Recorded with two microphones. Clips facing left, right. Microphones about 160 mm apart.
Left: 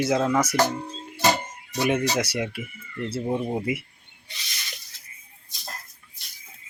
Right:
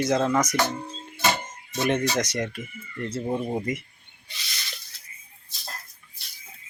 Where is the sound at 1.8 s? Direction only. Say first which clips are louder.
Left 1 dB; 5° left (ahead or behind).